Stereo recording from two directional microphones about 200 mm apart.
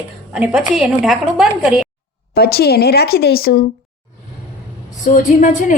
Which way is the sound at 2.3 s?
50° left (ahead or behind).